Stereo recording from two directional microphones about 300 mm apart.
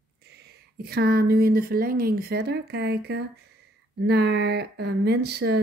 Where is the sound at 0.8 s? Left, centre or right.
Right.